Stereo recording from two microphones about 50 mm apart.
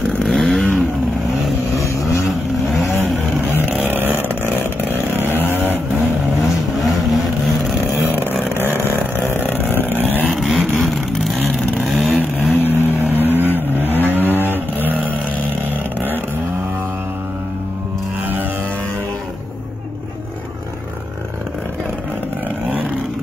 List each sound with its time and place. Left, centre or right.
0.2 s vehicle: centre
2.2 s vehicle: centre
3.8 s vehicle: right
7.4 s vehicle: centre
8.0 s vehicle: right
8.7 s vehicle: left
9.5 s a sound: left
9.9 s vehicle: right
10.3 s vehicle: centre
12.5 s vehicle: right